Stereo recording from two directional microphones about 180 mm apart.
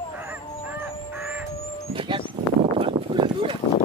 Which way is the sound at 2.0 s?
30° right (ahead or behind).